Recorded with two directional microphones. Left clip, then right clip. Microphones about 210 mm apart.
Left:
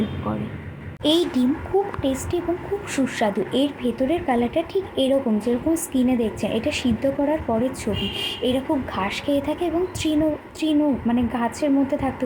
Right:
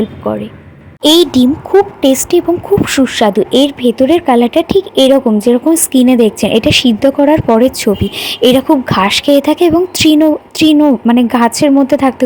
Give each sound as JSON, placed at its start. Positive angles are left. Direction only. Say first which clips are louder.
{"t": 0.2, "sound": "a woman's voice", "louder": "right 12 dB", "side_deg": -40}